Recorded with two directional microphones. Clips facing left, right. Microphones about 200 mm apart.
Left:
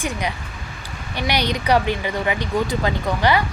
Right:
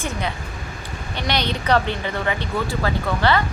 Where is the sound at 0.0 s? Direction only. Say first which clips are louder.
Left 1 dB; 15° left (ahead or behind).